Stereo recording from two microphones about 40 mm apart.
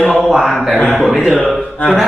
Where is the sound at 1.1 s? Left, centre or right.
Centre.